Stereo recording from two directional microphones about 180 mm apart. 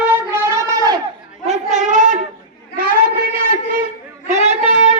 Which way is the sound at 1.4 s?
40° right (ahead or behind).